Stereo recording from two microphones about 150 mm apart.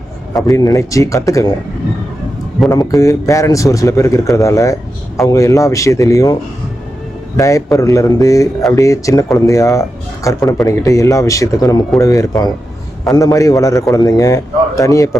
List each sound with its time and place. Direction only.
0.4 s speech: 25° left (ahead or behind)
2.6 s speech: 20° left (ahead or behind)
7.3 s speech: 20° left (ahead or behind)